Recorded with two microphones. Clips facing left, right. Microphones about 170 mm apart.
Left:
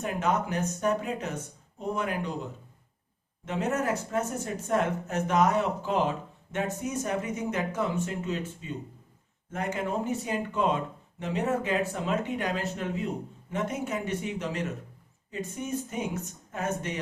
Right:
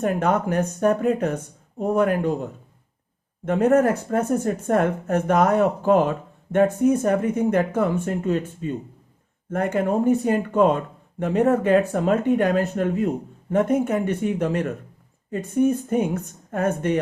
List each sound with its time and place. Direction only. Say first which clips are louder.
0.0 s speech: right 7 dB; 55° right (ahead or behind)